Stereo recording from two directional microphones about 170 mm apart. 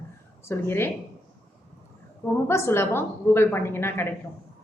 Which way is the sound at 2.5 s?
15° left (ahead or behind).